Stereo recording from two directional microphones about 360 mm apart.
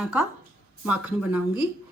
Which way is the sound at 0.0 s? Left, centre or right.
Centre.